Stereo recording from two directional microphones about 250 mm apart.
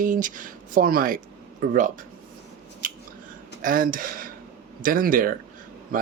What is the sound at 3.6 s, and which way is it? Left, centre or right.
Speech, right.